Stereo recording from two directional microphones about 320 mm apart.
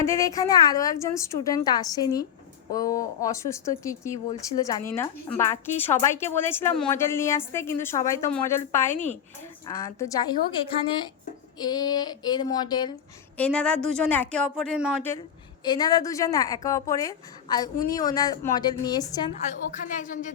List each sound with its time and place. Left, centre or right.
0.0 s a woman's voice: centre
15.6 s a woman's voice: centre
19.7 s speech: left